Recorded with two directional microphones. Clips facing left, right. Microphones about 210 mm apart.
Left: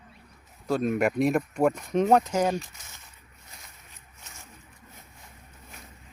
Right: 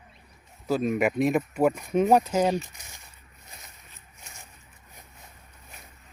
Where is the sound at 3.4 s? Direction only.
20° right (ahead or behind).